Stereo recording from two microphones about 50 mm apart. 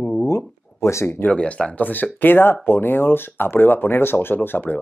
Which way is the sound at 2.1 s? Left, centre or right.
Left.